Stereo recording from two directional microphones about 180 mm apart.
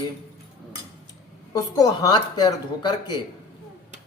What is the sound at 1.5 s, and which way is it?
A man's voice, 20° left (ahead or behind).